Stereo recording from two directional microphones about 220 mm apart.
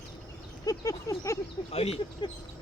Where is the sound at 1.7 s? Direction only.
25° left (ahead or behind).